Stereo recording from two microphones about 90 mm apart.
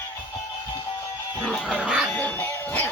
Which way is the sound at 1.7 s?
10° right (ahead or behind).